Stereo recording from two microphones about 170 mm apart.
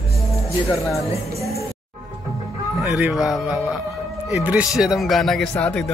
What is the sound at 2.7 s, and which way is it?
Speech, 5° right (ahead or behind).